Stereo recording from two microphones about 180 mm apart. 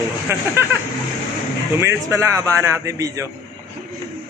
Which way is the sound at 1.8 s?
15° right (ahead or behind).